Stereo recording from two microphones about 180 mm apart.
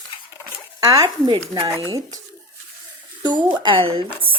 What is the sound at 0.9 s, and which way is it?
A woman's voice, 20° right (ahead or behind).